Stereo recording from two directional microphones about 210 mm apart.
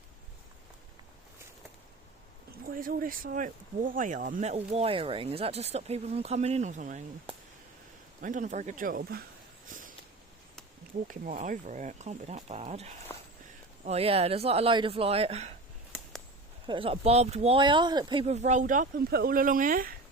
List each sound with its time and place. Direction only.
2.5 s speech: 45° right (ahead or behind)
11.1 s speech: 40° right (ahead or behind)
13.1 s a sound: 15° left (ahead or behind)
13.8 s speech: 30° right (ahead or behind)
16.6 s speech: 25° right (ahead or behind); by 20.0 s 40° right (ahead or behind)